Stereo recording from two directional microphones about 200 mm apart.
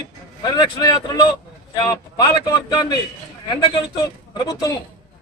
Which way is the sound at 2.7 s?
20° left (ahead or behind).